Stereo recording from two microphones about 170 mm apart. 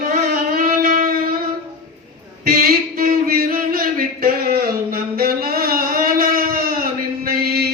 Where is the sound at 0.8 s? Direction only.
55° right (ahead or behind).